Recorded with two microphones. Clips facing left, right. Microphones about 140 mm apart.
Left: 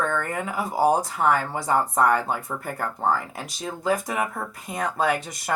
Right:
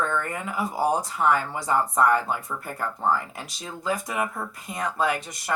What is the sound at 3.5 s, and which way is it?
Speech, 40° left (ahead or behind).